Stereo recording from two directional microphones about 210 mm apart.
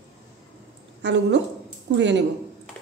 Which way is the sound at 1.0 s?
55° right (ahead or behind).